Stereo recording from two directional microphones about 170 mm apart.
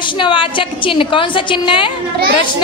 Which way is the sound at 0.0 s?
30° left (ahead or behind).